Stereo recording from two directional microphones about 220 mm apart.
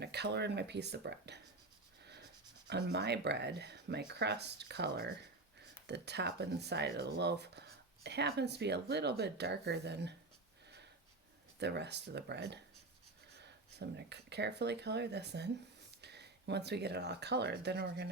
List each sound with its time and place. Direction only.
0.0 s speech: 50° right (ahead or behind)
2.6 s speech: 50° right (ahead or behind)
11.6 s speech: 50° right (ahead or behind)